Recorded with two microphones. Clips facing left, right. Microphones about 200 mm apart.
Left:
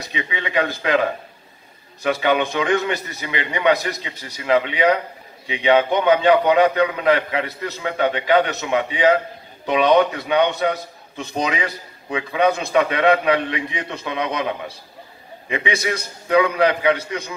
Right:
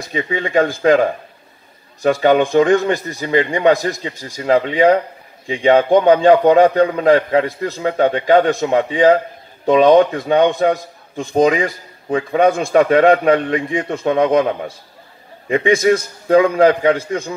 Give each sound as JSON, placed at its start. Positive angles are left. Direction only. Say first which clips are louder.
{"t": 0.0, "sound": "a man's voice", "louder": "right 7 dB", "side_deg": -45}